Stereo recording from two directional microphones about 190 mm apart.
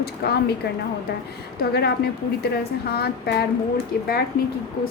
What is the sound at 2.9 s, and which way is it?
Speech, 55° left (ahead or behind).